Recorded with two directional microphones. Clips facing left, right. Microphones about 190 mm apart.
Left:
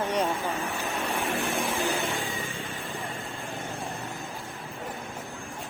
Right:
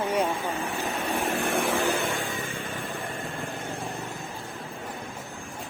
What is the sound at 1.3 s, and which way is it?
Vehicle, 55° right (ahead or behind).